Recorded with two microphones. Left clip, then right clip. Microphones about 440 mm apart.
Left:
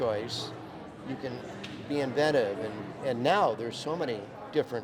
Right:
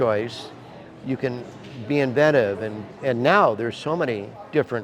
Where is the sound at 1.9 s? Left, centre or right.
Right.